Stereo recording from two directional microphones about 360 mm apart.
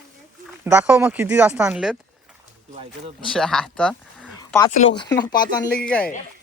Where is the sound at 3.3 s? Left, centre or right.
Centre.